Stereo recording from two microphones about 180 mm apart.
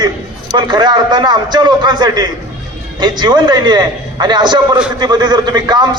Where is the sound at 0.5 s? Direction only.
25° right (ahead or behind).